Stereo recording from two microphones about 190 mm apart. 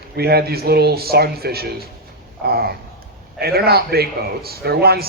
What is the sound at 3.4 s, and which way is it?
A man's voice, 55° right (ahead or behind).